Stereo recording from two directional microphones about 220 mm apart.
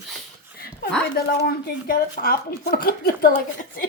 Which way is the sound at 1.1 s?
40° left (ahead or behind).